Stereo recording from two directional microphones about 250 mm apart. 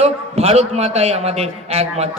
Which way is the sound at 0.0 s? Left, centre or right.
Right.